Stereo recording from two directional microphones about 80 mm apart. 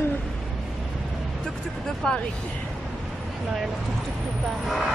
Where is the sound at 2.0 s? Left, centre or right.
Centre.